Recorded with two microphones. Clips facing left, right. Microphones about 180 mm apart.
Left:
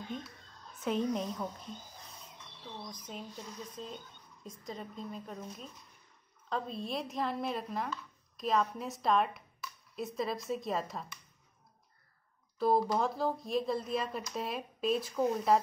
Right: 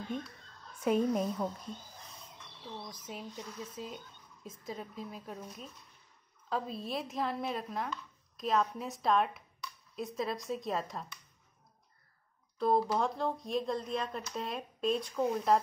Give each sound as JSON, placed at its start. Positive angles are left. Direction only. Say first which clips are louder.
{"t": 0.7, "sound": "a woman's voice", "louder": "right 3 dB", "side_deg": -10}
{"t": 2.9, "sound": "speech", "louder": "right 1 dB", "side_deg": -5}
{"t": 12.5, "sound": "speech", "louder": "even", "side_deg": 5}